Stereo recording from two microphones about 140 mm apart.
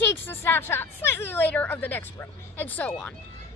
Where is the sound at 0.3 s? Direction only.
15° left (ahead or behind).